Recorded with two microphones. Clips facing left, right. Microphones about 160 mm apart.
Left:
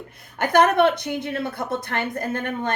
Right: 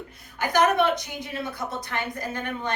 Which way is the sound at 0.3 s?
55° left (ahead or behind).